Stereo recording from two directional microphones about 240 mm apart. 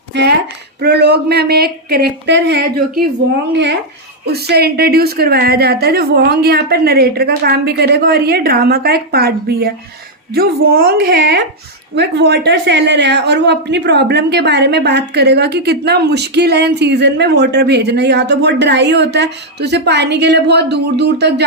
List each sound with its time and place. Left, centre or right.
0.1 s a woman's voice: right
4.3 s a woman's voice: right